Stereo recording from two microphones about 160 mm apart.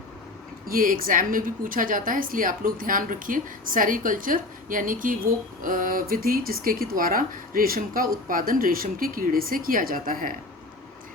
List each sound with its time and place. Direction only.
0.7 s a woman's voice: 65° right (ahead or behind)